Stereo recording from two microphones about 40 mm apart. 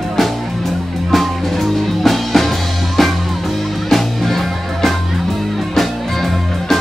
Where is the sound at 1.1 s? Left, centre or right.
Centre.